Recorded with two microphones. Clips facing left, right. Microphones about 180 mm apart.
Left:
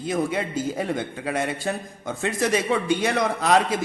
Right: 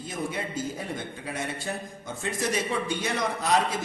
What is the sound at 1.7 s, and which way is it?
A man's voice, 75° left (ahead or behind).